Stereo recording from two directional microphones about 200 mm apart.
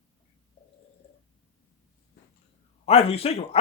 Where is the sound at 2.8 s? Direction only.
30° left (ahead or behind).